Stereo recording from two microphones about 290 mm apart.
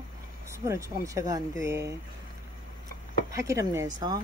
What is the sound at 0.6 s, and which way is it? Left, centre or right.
Speech, centre.